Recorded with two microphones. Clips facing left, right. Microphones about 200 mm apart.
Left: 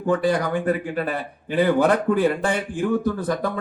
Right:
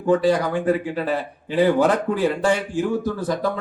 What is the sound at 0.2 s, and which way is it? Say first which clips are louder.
Speech: right 2 dB; 55° left (ahead or behind).